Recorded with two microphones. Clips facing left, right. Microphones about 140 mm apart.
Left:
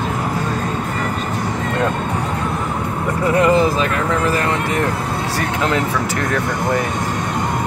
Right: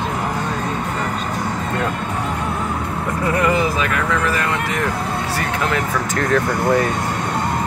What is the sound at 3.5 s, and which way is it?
Speech, 35° left (ahead or behind).